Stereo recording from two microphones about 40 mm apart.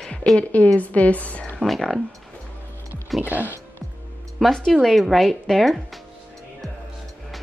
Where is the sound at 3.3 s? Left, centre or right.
Right.